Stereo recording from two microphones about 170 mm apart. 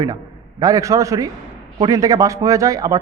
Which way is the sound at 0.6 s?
20° right (ahead or behind).